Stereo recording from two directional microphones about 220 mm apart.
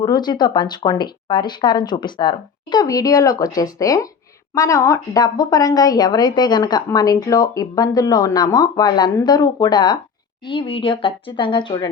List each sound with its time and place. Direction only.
0.0 s a woman's voice: 20° left (ahead or behind)